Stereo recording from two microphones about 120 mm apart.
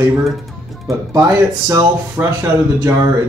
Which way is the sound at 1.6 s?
25° right (ahead or behind).